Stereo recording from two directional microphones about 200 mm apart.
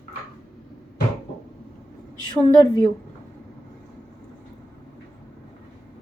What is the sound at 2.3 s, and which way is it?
Speech, 20° left (ahead or behind).